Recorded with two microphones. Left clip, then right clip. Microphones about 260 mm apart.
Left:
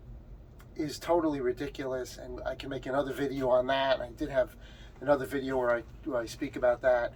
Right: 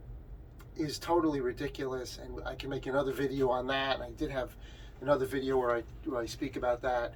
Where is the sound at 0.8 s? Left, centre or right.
Centre.